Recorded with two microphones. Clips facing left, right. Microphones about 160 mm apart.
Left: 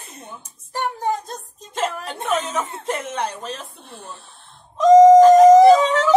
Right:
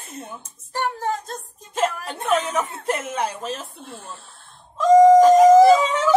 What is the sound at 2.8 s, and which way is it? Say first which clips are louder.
Speech: right 1 dB; 5° right (ahead or behind).